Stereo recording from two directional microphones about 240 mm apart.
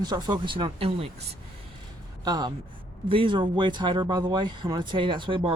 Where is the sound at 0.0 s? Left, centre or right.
Centre.